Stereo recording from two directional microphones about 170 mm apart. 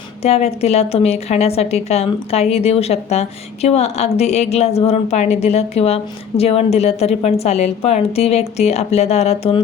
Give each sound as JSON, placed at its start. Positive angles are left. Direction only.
{"t": 0.2, "sound": "a woman's voice", "side_deg": 40}